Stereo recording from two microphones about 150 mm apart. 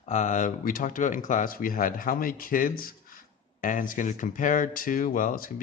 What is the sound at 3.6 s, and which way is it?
Speech, 60° left (ahead or behind).